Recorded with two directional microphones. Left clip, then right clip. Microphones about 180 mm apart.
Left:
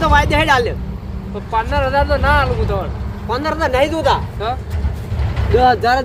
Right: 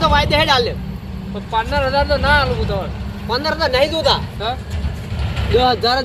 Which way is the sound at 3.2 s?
15° left (ahead or behind).